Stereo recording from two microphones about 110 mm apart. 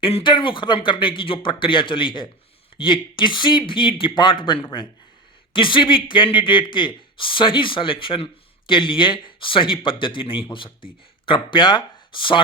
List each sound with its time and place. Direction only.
0.0 s speech: 50° left (ahead or behind)